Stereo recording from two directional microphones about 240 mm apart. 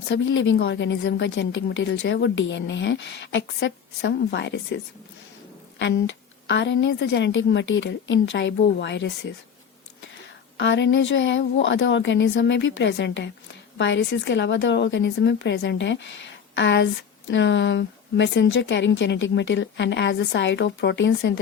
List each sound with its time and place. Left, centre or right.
0.1 s a woman's voice: left
5.8 s a woman's voice: left
10.6 s a woman's voice: left